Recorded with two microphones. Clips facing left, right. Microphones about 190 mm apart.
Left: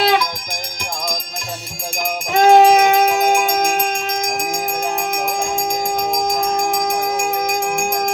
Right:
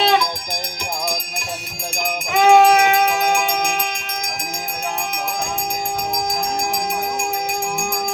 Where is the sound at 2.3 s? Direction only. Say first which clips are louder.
Left 2 dB; 40° left (ahead or behind).